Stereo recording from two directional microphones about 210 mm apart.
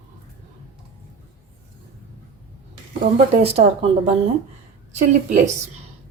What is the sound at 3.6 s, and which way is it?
Speech, 35° right (ahead or behind).